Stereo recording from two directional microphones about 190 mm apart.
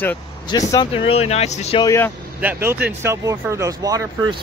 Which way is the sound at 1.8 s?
15° left (ahead or behind).